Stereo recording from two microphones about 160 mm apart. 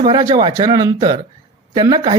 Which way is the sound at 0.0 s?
25° right (ahead or behind).